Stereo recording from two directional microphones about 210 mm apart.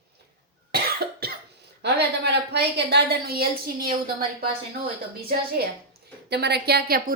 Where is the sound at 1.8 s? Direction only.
50° right (ahead or behind).